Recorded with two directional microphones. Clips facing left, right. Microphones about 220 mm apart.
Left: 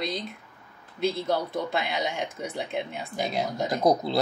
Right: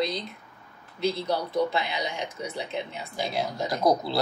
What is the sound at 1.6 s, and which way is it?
Speech, 50° left (ahead or behind).